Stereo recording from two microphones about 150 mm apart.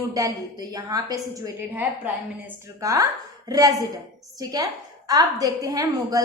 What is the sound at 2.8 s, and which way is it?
A woman's voice, 20° right (ahead or behind).